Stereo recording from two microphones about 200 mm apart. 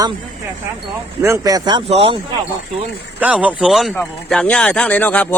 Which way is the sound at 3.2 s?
5° right (ahead or behind).